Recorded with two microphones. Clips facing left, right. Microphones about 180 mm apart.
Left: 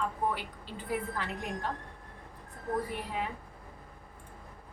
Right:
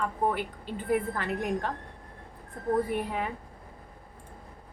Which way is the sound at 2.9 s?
55° right (ahead or behind).